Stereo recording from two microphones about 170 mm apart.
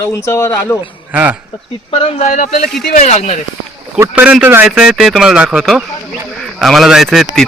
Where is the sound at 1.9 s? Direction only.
45° left (ahead or behind).